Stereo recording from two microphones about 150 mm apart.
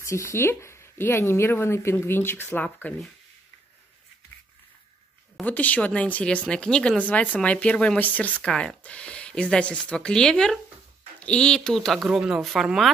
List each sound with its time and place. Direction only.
0.0 s speech: 20° left (ahead or behind)
5.4 s speech: 10° left (ahead or behind)